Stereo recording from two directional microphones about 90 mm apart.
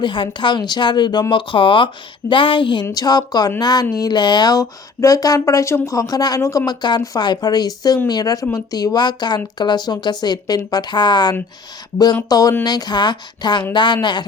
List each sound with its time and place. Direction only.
0.0 s a woman's voice: 65° left (ahead or behind)
1.3 s speech: 70° left (ahead or behind)
2.9 s a woman's voice: 45° left (ahead or behind)
6.7 s speech: 50° left (ahead or behind)
12.3 s a woman's voice: 45° left (ahead or behind)